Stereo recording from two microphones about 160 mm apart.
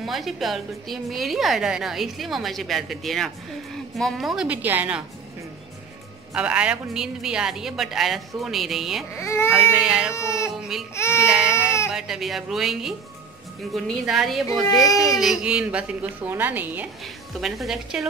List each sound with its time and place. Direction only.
0.0 s a woman's voice: centre (ahead or behind)
6.3 s a woman's voice: 5° right (ahead or behind)
9.1 s speech: 15° left (ahead or behind)
9.5 s a woman's voice: 5° right (ahead or behind)
10.1 s speech: 20° left (ahead or behind)
10.5 s a woman's voice: centre (ahead or behind)
14.6 s speech: 20° left (ahead or behind)
15.1 s a woman's voice: centre (ahead or behind)
17.4 s a woman's voice: centre (ahead or behind)